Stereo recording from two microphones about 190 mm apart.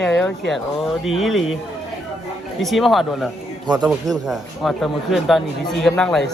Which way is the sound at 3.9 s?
Centre (ahead or behind).